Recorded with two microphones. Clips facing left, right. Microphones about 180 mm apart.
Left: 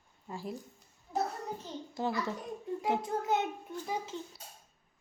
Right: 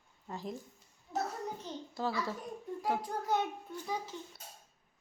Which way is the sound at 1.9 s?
20° left (ahead or behind).